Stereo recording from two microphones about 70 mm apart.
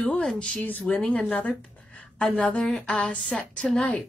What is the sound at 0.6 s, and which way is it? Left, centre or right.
Speech, left.